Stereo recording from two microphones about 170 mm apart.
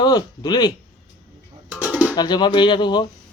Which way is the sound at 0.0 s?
25° left (ahead or behind).